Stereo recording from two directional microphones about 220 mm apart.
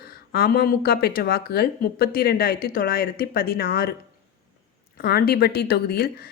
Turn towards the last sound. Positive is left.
turn(degrees=45)  # may be behind; listen again after turning